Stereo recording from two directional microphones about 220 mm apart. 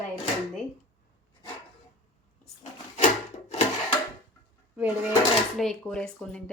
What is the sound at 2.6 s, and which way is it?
Wood, 30° left (ahead or behind).